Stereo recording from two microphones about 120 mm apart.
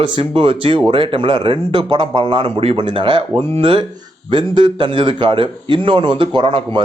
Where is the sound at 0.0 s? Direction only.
50° right (ahead or behind).